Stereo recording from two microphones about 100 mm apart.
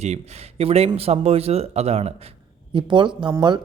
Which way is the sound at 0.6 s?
90° right.